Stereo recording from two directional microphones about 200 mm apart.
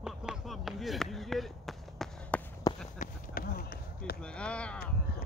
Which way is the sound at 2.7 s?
20° left (ahead or behind).